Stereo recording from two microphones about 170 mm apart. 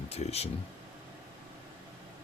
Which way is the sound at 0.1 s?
40° left (ahead or behind).